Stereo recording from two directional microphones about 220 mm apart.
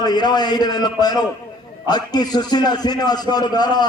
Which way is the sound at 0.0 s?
20° left (ahead or behind).